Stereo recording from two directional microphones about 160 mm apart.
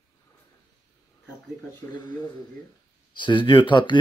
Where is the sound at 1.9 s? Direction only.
25° left (ahead or behind).